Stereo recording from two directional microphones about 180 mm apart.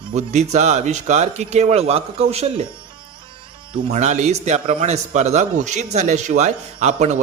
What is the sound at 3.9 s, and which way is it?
A man's voice, 40° right (ahead or behind).